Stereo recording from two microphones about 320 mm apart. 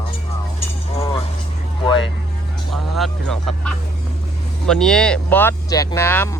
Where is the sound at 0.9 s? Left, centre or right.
Centre.